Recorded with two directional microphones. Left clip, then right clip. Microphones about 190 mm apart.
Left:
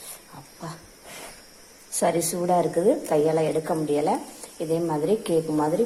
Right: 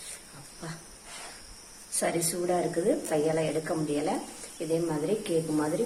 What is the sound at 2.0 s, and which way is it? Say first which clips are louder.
A woman's voice: left 6 dB; 20° left (ahead or behind).